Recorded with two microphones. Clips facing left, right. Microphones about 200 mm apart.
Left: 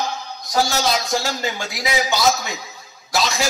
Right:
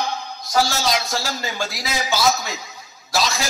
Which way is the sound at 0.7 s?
Centre (ahead or behind).